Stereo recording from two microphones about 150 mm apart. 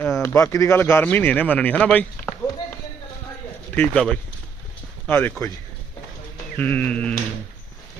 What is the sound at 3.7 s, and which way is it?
Speech, 10° left (ahead or behind).